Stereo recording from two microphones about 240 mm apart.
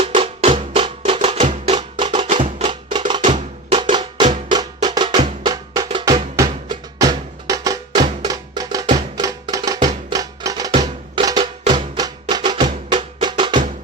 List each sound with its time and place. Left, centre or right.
0.0 s music: right
5.4 s drum: centre
8.9 s music: centre